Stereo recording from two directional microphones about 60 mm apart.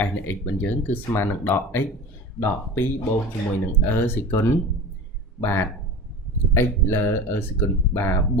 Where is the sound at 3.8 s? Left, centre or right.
Left.